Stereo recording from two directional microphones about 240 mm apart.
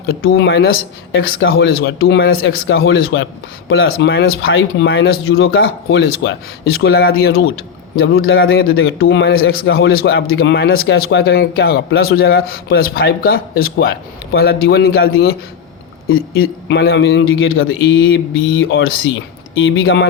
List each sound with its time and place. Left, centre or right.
0.0 s a man's voice: left
5.5 s speech: left
16.0 s a man's voice: left